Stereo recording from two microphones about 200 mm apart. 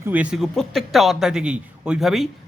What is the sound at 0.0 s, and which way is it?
Speech, 10° right (ahead or behind).